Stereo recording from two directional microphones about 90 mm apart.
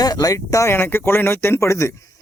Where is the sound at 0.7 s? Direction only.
25° left (ahead or behind).